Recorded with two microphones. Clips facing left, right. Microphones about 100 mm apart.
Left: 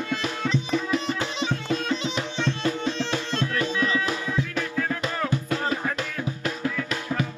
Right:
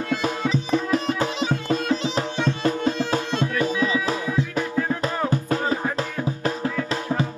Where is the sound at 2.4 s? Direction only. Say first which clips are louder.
Right 3 dB; 45° right (ahead or behind).